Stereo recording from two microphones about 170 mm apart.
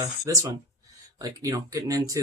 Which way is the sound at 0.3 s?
20° right (ahead or behind).